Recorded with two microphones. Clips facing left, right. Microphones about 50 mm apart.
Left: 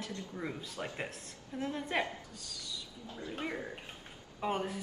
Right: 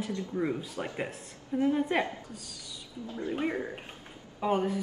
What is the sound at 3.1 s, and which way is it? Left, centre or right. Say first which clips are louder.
Speech: right 8 dB; right.